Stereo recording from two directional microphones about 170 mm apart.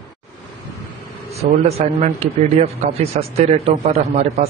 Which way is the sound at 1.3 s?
40° right (ahead or behind).